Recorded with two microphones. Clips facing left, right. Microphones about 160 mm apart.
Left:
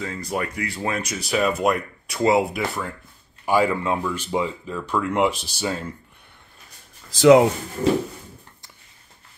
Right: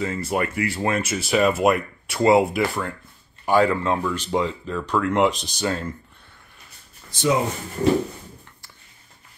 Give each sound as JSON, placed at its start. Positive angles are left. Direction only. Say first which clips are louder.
{"t": 0.0, "sound": "speech", "louder": "right 3 dB", "side_deg": -5}
{"t": 7.1, "sound": "speech", "louder": "left 9 dB", "side_deg": 85}